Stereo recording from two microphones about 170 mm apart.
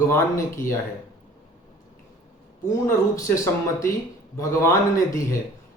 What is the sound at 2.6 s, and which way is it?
A man's voice, 15° left (ahead or behind).